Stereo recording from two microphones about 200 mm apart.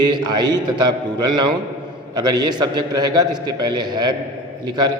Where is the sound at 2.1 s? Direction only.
20° right (ahead or behind).